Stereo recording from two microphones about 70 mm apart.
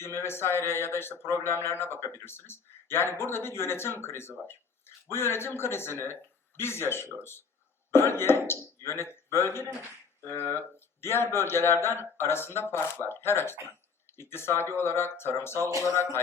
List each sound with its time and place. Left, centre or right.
0.0 s speech: left
15.7 s speech: right